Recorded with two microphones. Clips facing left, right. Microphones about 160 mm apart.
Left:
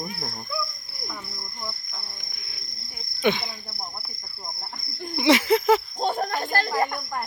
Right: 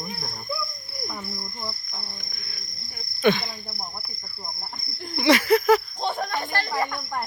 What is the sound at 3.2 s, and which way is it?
Speech, 15° left (ahead or behind).